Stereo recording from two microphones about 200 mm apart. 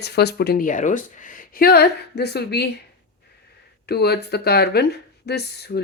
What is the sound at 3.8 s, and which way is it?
Speech, 55° left (ahead or behind).